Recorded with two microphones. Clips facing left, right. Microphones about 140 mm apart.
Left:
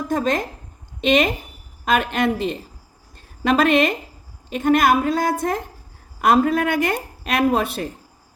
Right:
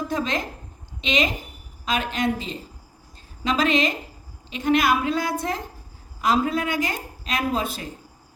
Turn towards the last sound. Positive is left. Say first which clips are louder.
# left 6 dB
turn(degrees=65)  # may be behind; listen again after turning